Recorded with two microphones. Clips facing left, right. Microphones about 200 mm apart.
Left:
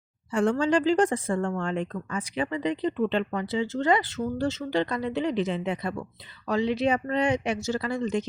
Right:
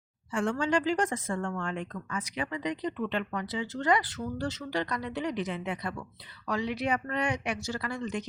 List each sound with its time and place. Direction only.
0.3 s speech: 35° left (ahead or behind)